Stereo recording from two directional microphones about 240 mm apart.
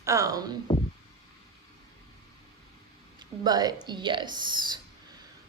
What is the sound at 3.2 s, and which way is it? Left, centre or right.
Speech, centre.